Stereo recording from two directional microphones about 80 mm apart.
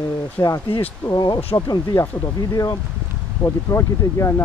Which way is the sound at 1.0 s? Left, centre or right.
Left.